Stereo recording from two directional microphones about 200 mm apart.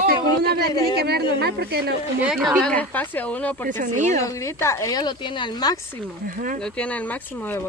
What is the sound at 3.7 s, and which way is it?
Speech, 40° right (ahead or behind).